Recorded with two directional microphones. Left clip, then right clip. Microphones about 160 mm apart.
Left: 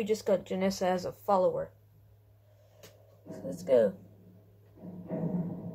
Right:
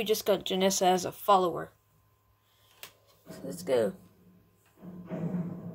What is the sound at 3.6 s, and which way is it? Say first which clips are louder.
Speech: left 3 dB; 90° right.